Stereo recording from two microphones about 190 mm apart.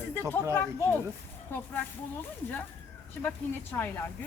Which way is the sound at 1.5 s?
10° left (ahead or behind).